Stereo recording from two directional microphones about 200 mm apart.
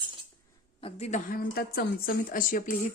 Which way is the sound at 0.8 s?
30° left (ahead or behind).